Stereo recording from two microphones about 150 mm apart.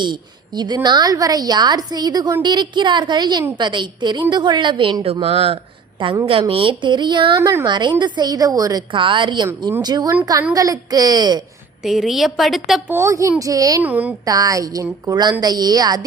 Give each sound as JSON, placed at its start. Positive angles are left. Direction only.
{"t": 0.0, "sound": "a woman's voice", "side_deg": -30}
{"t": 5.2, "sound": "a woman's voice", "side_deg": -40}
{"t": 11.8, "sound": "a woman's voice", "side_deg": 0}
{"t": 12.9, "sound": "a woman's voice", "side_deg": -20}
{"t": 13.8, "sound": "a woman's voice", "side_deg": -10}
{"t": 14.3, "sound": "a woman's voice", "side_deg": -25}